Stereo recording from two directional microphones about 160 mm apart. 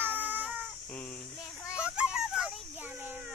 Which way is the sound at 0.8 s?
10° left (ahead or behind).